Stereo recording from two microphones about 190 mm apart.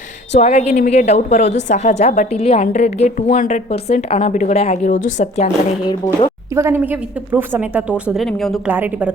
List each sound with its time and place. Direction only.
0.3 s a woman's voice: 35° left (ahead or behind)
6.5 s a woman's voice: 15° right (ahead or behind)